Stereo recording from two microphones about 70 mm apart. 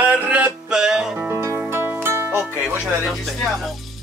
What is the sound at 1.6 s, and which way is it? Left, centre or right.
Music, right.